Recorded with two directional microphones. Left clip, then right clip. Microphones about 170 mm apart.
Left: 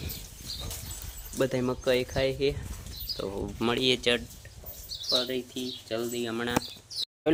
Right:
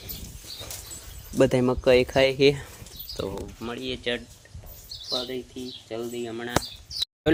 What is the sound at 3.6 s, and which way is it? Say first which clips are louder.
Speech: left 8 dB; 90° left.